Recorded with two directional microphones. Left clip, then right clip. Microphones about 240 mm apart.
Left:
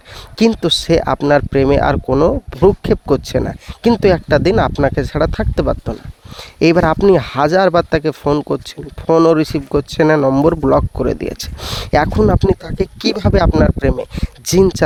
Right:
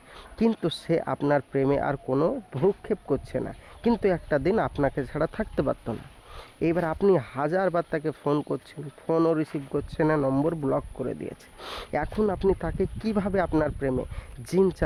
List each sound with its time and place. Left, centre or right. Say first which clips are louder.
0.3 s speech: left 13 dB; left
2.5 s speech: left 13 dB; left
6.6 s speech: left 14 dB; left
11.6 s speech: left 15 dB; left